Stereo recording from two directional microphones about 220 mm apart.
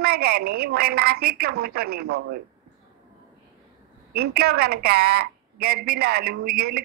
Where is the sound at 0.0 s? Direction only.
45° right (ahead or behind).